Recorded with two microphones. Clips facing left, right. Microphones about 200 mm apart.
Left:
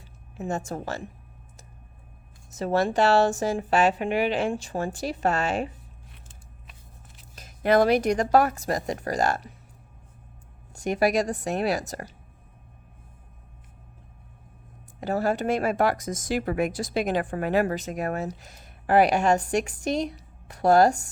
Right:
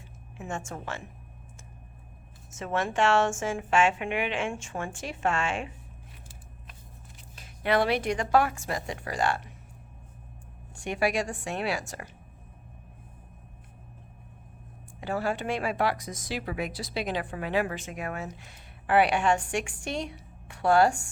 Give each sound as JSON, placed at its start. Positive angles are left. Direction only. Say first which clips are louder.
{"t": 0.3, "sound": "speech", "louder": "left 6 dB", "side_deg": 40}
{"t": 2.5, "sound": "speech", "louder": "left 6 dB", "side_deg": 35}
{"t": 7.3, "sound": "speech", "louder": "left 5 dB", "side_deg": 40}
{"t": 10.8, "sound": "speech", "louder": "left 5 dB", "side_deg": 40}
{"t": 15.0, "sound": "speech", "louder": "left 5 dB", "side_deg": 40}